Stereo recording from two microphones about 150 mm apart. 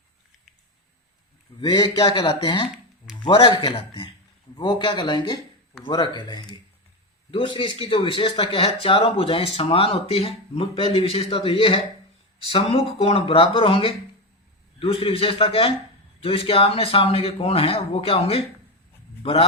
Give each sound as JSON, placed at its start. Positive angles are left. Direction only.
{"t": 1.6, "sound": "speech", "side_deg": 30}